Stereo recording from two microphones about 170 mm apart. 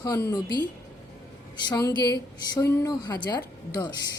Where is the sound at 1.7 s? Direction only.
20° left (ahead or behind).